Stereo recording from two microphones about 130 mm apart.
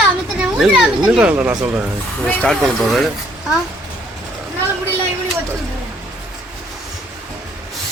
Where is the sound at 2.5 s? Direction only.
5° left (ahead or behind).